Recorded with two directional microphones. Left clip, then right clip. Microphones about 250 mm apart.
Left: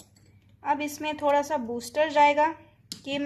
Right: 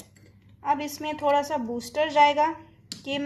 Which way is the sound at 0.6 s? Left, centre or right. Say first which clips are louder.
Right 1 dB; centre.